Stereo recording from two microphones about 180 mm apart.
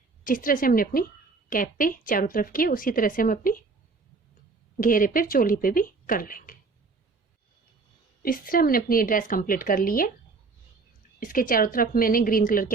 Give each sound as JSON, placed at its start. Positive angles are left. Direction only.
{"t": 0.3, "sound": "speech", "side_deg": 50}
{"t": 4.8, "sound": "speech", "side_deg": 50}
{"t": 8.2, "sound": "speech", "side_deg": 50}
{"t": 11.2, "sound": "speech", "side_deg": 50}